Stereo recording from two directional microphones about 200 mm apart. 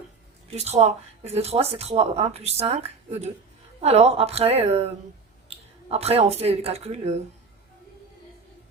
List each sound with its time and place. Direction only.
0.5 s speech: 30° right (ahead or behind)